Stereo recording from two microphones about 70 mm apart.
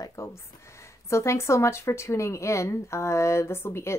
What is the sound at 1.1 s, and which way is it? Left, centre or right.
Speech, left.